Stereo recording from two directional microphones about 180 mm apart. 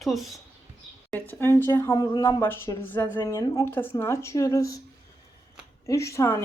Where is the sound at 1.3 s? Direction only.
10° left (ahead or behind).